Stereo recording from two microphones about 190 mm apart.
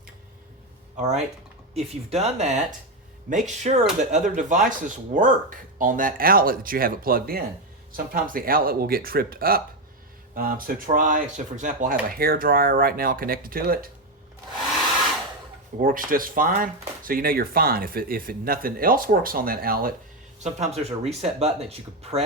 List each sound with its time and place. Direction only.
1.7 s speech: 35° right (ahead or behind); by 13.9 s 50° right (ahead or behind)
15.8 s speech: 50° right (ahead or behind)
20.4 s speech: 35° right (ahead or behind)